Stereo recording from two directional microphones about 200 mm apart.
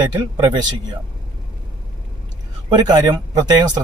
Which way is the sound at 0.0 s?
20° right (ahead or behind).